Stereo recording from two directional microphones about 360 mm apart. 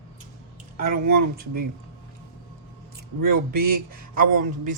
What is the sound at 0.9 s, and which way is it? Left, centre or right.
Speech, right.